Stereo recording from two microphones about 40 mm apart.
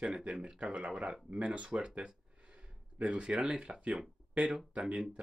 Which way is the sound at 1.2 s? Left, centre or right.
Right.